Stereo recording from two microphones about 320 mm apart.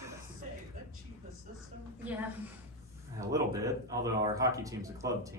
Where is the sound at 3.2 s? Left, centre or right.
Centre.